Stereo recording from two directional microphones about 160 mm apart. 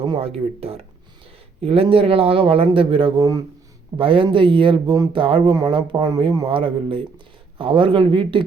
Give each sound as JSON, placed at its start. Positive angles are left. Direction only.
{"t": 0.0, "sound": "speech", "side_deg": -35}